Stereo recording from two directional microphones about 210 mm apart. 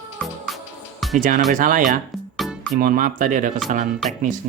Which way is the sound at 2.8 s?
40° right (ahead or behind).